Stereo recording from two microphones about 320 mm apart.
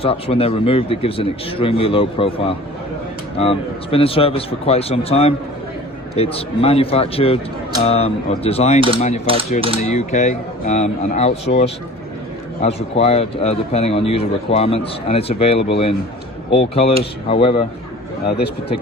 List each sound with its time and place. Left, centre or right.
0.0 s speech: centre
9.2 s typewriter: centre
9.8 s speech: left
18.3 s speech: left